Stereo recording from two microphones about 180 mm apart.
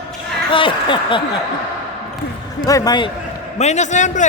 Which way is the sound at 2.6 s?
20° left (ahead or behind).